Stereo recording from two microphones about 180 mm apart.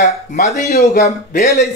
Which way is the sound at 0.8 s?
40° left (ahead or behind).